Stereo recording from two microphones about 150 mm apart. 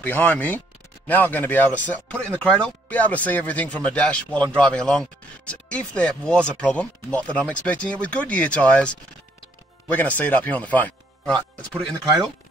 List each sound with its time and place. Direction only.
0.0 s speech: 10° left (ahead or behind)